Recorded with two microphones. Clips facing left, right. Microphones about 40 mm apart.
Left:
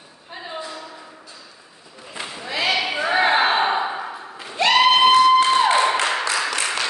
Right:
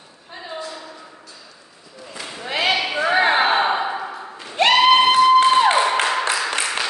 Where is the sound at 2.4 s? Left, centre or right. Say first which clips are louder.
Right 2 dB; right.